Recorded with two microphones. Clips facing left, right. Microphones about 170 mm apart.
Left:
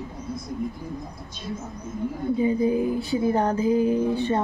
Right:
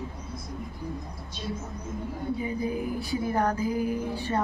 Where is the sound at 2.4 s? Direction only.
25° left (ahead or behind).